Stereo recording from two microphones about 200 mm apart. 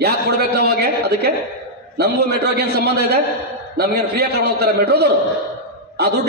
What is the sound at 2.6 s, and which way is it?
A man's voice, 50° right (ahead or behind).